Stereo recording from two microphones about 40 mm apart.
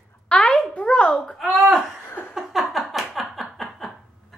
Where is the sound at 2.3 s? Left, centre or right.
Centre.